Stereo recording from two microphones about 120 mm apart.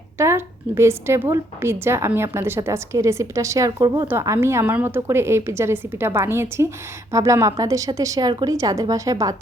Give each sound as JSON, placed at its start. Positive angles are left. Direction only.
{"t": 0.2, "sound": "a woman's voice", "side_deg": -20}
{"t": 4.1, "sound": "a woman's voice", "side_deg": -20}
{"t": 8.3, "sound": "speech", "side_deg": -40}
{"t": 8.5, "sound": "a woman's voice", "side_deg": -30}